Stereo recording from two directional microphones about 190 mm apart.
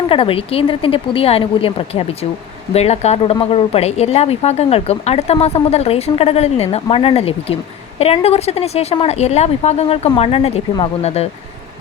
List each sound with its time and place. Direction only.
0.1 s speech: 30° left (ahead or behind)